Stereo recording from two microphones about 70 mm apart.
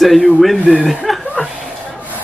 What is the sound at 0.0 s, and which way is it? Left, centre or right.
Speech, centre.